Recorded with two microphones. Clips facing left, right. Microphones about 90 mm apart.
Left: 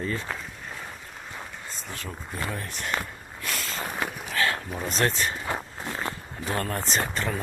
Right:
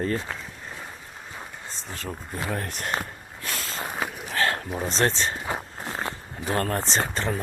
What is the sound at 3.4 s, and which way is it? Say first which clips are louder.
Vehicle: even; 30° right (ahead or behind).